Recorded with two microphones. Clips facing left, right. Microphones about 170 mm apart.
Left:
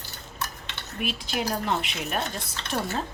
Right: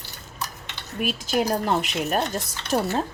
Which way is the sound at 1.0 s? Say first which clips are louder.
Right 6 dB; 45° right (ahead or behind).